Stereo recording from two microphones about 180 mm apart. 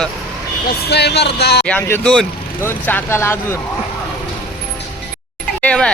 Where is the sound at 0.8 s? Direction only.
65° left (ahead or behind).